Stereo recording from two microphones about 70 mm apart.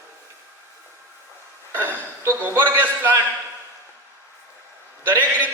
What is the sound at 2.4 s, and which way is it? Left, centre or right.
Speech, right.